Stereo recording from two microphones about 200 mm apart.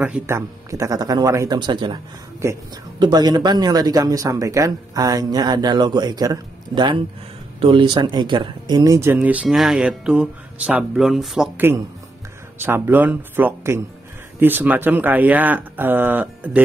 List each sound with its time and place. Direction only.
0.0 s speech: 10° right (ahead or behind)
3.0 s speech: 20° right (ahead or behind)